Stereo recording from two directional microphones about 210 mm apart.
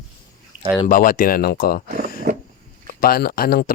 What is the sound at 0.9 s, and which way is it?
Speech, 40° left (ahead or behind).